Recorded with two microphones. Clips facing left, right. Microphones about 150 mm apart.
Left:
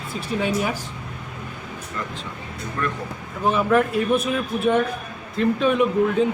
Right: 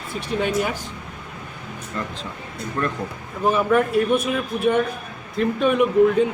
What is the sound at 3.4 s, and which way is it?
Speech, centre (ahead or behind).